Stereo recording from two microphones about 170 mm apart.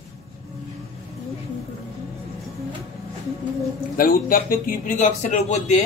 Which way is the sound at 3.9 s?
55° left (ahead or behind).